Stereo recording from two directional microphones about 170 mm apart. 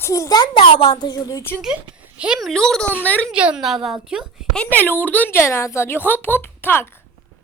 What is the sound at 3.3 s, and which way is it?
A woman's voice, 5° right (ahead or behind).